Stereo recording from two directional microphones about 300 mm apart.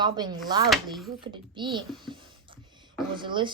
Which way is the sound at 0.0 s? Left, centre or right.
Centre.